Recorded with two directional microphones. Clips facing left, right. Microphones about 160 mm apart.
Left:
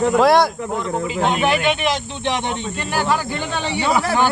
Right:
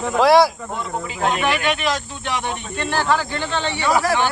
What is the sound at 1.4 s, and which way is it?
Speech, 25° left (ahead or behind).